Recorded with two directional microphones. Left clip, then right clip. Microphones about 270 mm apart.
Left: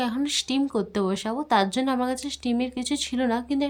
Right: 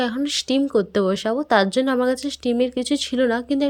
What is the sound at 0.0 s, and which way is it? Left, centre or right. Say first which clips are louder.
Speech: right 3 dB; centre.